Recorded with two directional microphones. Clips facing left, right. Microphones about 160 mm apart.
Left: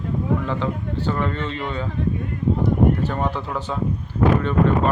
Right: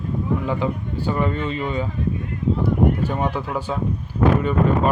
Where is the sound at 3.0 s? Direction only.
10° right (ahead or behind).